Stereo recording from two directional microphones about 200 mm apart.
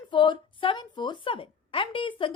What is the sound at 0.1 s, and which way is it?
A woman's voice, 25° left (ahead or behind).